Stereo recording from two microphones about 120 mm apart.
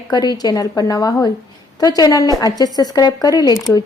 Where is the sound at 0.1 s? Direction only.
35° left (ahead or behind).